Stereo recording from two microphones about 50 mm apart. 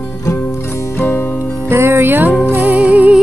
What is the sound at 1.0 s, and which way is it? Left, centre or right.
Music, left.